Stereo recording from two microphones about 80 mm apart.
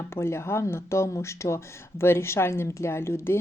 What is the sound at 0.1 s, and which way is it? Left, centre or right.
Speech, left.